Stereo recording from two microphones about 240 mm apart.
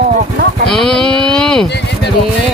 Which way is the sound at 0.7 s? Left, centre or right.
Centre.